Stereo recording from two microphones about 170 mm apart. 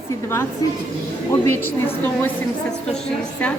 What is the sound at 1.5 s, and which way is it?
Speech, 10° left (ahead or behind).